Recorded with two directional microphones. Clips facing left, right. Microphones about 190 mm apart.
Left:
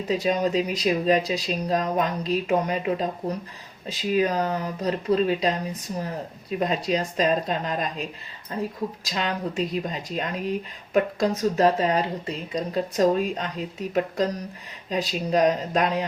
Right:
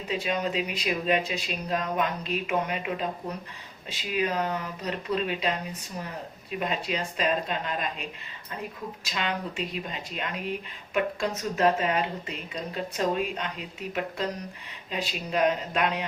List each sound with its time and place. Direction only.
0.1 s speech: 40° left (ahead or behind)
6.6 s speech: 40° left (ahead or behind)